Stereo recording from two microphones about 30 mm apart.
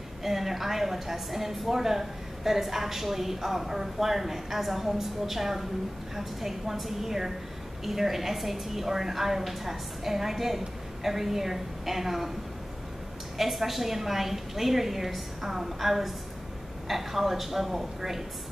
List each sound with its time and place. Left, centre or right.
0.2 s a woman's voice: centre
13.4 s a woman's voice: centre